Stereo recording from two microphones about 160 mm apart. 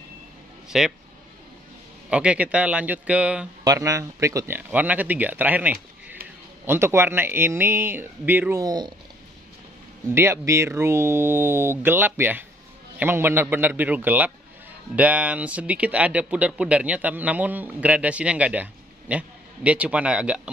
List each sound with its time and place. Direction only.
0.7 s speech: 5° right (ahead or behind)
2.0 s speech: 5° right (ahead or behind)
3.6 s speech: 20° right (ahead or behind)
8.6 s speech: 25° right (ahead or behind)
10.1 s speech: 15° right (ahead or behind)